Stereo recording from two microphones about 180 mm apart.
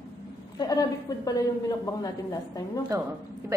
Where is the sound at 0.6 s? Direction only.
20° left (ahead or behind).